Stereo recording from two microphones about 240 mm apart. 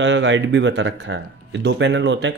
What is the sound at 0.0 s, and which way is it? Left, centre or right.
Speech, right.